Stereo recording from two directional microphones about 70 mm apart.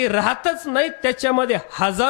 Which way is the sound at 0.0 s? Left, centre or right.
Centre.